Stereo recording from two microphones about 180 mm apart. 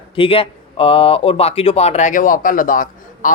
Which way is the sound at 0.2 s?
30° left (ahead or behind).